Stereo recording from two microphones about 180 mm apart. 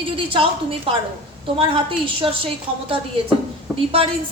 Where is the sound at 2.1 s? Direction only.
30° right (ahead or behind).